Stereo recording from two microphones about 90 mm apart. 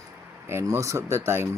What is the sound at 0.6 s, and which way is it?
Speech, 35° right (ahead or behind).